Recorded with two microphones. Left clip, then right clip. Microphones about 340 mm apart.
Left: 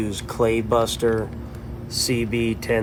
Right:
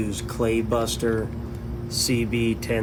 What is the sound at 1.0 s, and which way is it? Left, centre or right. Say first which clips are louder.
Speech: left 4 dB; left.